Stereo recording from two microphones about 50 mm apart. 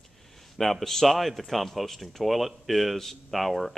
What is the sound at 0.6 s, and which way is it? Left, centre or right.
Speech, centre.